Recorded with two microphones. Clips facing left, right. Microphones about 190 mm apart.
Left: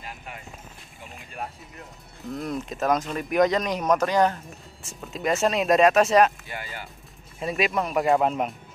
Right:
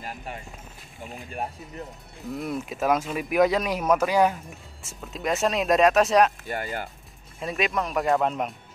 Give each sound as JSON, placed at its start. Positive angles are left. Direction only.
{"t": 2.2, "sound": "speech", "side_deg": 0}
{"t": 6.4, "sound": "speech", "side_deg": -45}
{"t": 7.3, "sound": "speech", "side_deg": 0}